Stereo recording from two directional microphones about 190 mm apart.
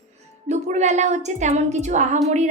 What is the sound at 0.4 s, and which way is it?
A woman's voice, 40° right (ahead or behind).